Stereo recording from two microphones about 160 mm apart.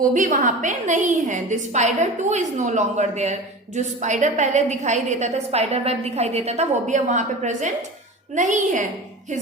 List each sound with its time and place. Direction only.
0.1 s a woman's voice: 55° right (ahead or behind)